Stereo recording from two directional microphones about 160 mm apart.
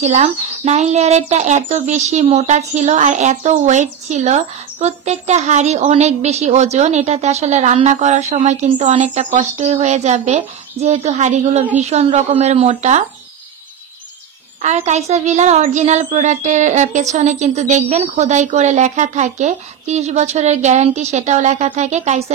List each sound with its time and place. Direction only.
0.0 s a child's voice: 45° right (ahead or behind)
14.6 s a child's voice: 45° right (ahead or behind)